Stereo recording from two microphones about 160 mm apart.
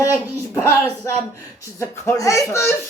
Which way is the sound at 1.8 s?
20° left (ahead or behind).